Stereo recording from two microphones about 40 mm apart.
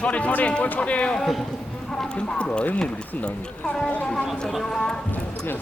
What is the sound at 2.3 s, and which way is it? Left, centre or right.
Speech, left.